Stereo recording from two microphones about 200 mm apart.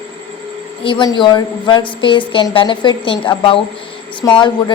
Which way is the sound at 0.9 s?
25° left (ahead or behind).